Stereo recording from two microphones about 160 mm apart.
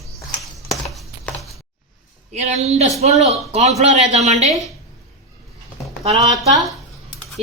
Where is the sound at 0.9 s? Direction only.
5° left (ahead or behind).